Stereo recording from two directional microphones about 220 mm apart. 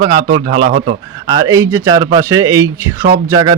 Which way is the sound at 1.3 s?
15° right (ahead or behind).